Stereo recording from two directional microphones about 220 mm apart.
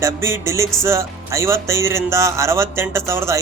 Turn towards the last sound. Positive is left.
turn(degrees=-10)  # may be behind; listen again after turning